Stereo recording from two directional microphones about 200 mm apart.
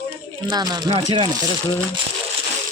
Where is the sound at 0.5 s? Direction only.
20° right (ahead or behind).